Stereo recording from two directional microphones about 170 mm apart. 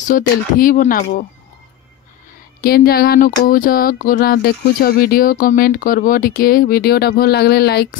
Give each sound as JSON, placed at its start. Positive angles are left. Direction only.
{"t": 0.0, "sound": "speech", "side_deg": 50}
{"t": 2.6, "sound": "speech", "side_deg": 65}